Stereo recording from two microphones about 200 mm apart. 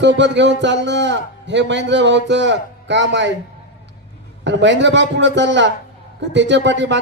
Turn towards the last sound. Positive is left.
turn(degrees=-65)  # may be behind; listen again after turning